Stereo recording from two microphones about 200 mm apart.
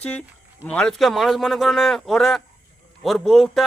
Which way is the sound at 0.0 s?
5° left (ahead or behind).